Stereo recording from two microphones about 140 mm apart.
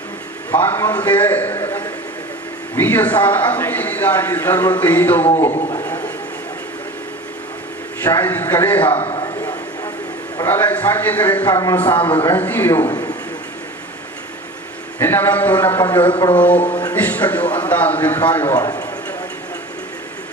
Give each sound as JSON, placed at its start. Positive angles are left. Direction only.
{"t": 0.5, "sound": "a man's voice", "side_deg": 15}
{"t": 5.5, "sound": "a sound", "side_deg": 25}
{"t": 8.0, "sound": "a man's voice", "side_deg": 15}
{"t": 9.0, "sound": "a sound", "side_deg": 35}
{"t": 10.3, "sound": "a man's voice", "side_deg": 15}
{"t": 11.4, "sound": "speech", "side_deg": 25}
{"t": 11.9, "sound": "a man's voice", "side_deg": 40}
{"t": 12.2, "sound": "a man's voice", "side_deg": 15}
{"t": 12.9, "sound": "a sound", "side_deg": 30}
{"t": 14.9, "sound": "a man's voice", "side_deg": 15}
{"t": 16.0, "sound": "a man's voice", "side_deg": 35}
{"t": 16.4, "sound": "a man's voice", "side_deg": 10}
{"t": 18.5, "sound": "a man's voice", "side_deg": 25}